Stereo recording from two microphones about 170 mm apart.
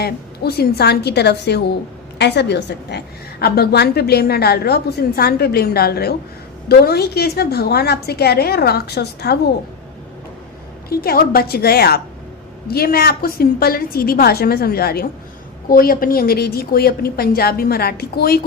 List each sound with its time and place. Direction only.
0.0 s a woman's voice: 70° left (ahead or behind)
3.4 s a woman's voice: 65° left (ahead or behind)
10.8 s a woman's voice: 60° left (ahead or behind)